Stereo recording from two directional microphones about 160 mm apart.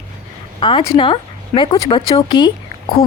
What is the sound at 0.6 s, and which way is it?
Speech, 30° left (ahead or behind).